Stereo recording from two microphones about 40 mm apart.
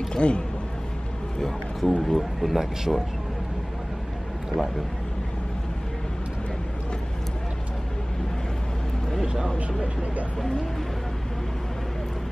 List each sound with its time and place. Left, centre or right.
0.1 s speech: left
1.4 s speech: centre